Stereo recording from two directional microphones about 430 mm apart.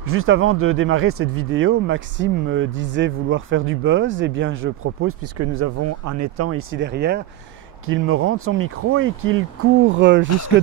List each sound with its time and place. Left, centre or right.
0.0 s speech: right